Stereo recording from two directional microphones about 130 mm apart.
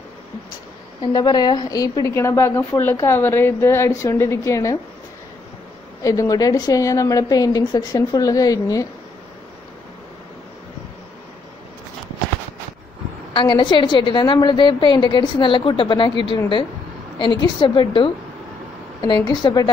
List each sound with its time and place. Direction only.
1.1 s a woman's voice: 35° left (ahead or behind)
6.0 s a woman's voice: 25° left (ahead or behind)
13.3 s a woman's voice: 35° left (ahead or behind)
17.2 s a woman's voice: 35° left (ahead or behind)
19.2 s a woman's voice: 30° left (ahead or behind)